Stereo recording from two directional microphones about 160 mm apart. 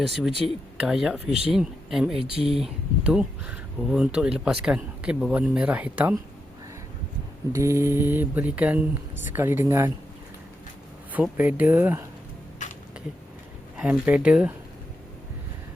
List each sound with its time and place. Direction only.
0.0 s speech: centre (ahead or behind)
2.1 s speech: 35° right (ahead or behind)
3.0 s speech: 5° right (ahead or behind)
7.5 s speech: 20° right (ahead or behind)
11.1 s speech: 10° right (ahead or behind)
13.7 s speech: 5° right (ahead or behind)